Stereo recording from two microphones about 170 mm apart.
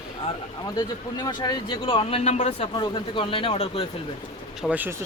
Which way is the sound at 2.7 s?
25° left (ahead or behind).